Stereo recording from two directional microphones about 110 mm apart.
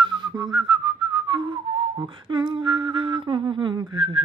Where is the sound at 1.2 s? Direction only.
50° right (ahead or behind).